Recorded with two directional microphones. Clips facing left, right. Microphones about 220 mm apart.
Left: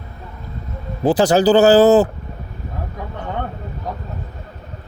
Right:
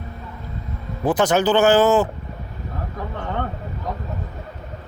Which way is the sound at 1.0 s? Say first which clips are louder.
Left 4 dB; 30° left (ahead or behind).